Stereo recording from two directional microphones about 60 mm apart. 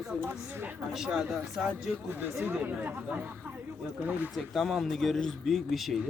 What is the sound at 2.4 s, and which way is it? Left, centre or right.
Speech, right.